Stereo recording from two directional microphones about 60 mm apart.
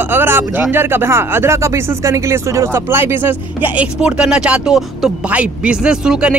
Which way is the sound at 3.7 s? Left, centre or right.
Centre.